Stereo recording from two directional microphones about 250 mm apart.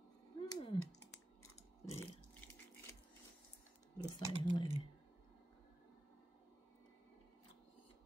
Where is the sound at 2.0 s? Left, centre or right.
Centre.